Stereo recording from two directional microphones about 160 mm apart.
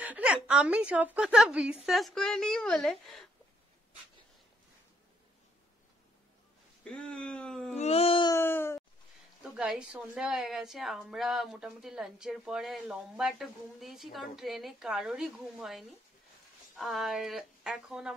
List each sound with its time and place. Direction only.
0.0 s a woman's voice: 10° right (ahead or behind)
6.8 s speech: 5° left (ahead or behind)
7.7 s a sound: 40° left (ahead or behind)
8.3 s groan: 15° left (ahead or behind)
9.4 s a woman's voice: 5° right (ahead or behind)